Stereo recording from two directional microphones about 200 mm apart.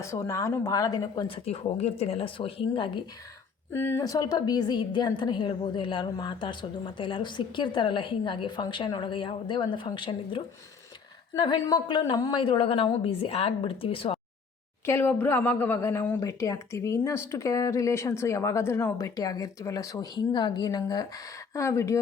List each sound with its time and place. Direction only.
0.0 s a woman's voice: 15° left (ahead or behind)
3.7 s a woman's voice: 10° left (ahead or behind); by 14.2 s 25° left (ahead or behind)
14.8 s speech: 10° left (ahead or behind)